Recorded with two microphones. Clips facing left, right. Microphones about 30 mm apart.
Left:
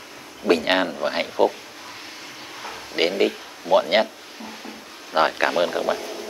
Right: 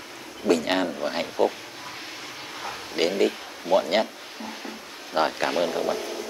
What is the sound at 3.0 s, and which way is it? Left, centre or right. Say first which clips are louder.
Speech: left 2 dB; left.